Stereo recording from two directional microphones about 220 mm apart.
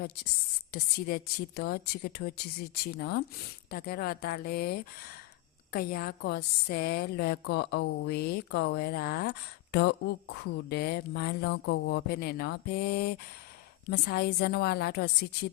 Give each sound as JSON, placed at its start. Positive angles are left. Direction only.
{"t": 0.7, "sound": "a woman's voice", "side_deg": 45}